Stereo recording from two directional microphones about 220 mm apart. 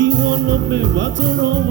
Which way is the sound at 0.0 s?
55° right (ahead or behind).